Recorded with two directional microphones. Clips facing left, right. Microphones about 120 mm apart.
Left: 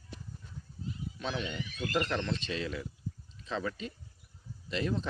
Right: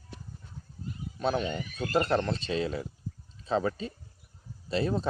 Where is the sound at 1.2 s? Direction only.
45° right (ahead or behind).